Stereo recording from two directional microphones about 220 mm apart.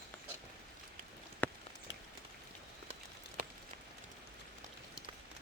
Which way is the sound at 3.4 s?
40° right (ahead or behind).